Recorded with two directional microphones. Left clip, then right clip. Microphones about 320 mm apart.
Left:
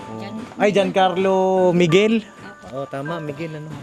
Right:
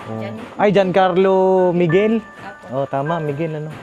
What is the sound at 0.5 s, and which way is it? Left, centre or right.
Speech, right.